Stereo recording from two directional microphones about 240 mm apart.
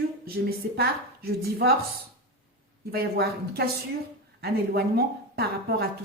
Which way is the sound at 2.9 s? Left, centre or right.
Right.